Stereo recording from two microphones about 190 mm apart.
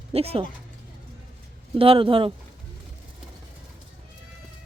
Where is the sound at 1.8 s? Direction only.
30° right (ahead or behind).